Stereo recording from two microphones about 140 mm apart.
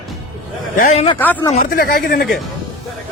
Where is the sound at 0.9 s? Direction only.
45° left (ahead or behind).